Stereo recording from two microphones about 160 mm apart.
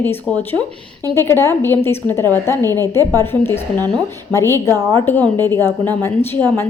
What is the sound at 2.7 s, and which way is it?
Speech, 20° right (ahead or behind).